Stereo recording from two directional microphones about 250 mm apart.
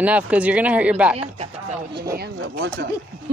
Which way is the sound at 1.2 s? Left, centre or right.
Right.